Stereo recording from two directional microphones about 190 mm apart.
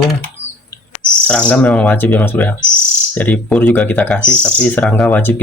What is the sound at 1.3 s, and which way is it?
Speech, 5° left (ahead or behind).